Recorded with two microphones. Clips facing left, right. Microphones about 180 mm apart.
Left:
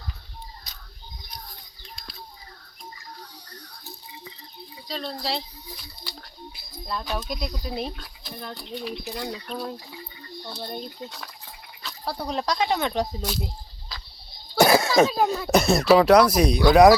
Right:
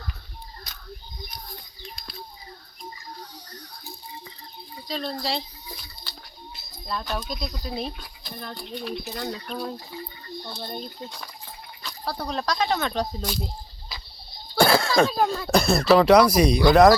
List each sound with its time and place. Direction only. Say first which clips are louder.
4.9 s speech: right 1 dB; centre (ahead or behind)
6.7 s speech: even; 5° left (ahead or behind)
7.9 s a sound: even; centre (ahead or behind)
8.7 s speech: even; 10° left (ahead or behind)
12.2 s speech: left 1 dB; 15° left (ahead or behind)
13.2 s speech: even; 5° left (ahead or behind)
14.6 s a sound: left 2 dB; 15° left (ahead or behind)
15.0 s speech: left 1 dB; 5° left (ahead or behind)
15.3 s speech: left 1 dB; 20° left (ahead or behind)